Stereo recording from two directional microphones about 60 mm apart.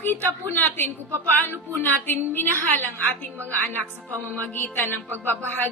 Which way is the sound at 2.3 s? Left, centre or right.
Left.